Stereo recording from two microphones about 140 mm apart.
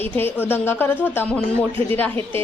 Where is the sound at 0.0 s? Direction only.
15° left (ahead or behind).